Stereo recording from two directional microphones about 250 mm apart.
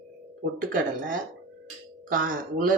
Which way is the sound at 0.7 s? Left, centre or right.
Right.